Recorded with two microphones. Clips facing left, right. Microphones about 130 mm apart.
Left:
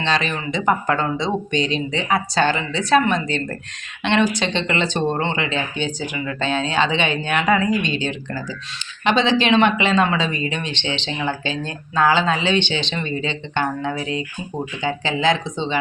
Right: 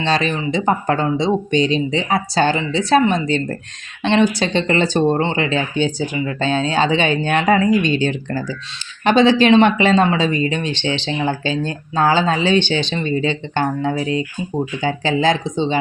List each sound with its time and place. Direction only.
0.0 s speech: 35° right (ahead or behind)